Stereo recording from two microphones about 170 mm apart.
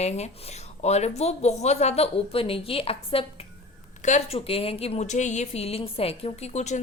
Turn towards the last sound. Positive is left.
turn(degrees=40)  # may be behind; listen again after turning